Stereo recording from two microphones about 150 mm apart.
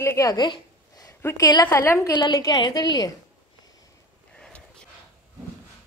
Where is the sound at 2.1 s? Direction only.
30° left (ahead or behind).